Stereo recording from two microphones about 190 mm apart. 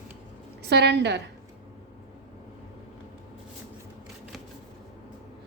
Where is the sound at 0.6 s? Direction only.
60° right (ahead or behind).